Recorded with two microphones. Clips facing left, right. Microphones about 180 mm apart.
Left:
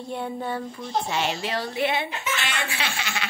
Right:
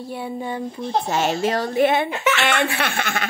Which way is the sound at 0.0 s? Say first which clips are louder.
Right 2 dB; 5° right (ahead or behind).